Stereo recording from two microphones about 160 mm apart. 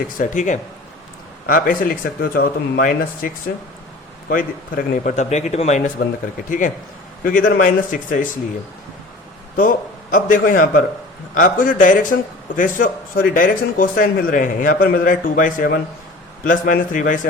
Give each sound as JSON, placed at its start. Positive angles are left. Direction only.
{"t": 0.2, "sound": "a man's voice", "side_deg": 50}
{"t": 7.3, "sound": "speech", "side_deg": 65}
{"t": 9.6, "sound": "speech", "side_deg": 60}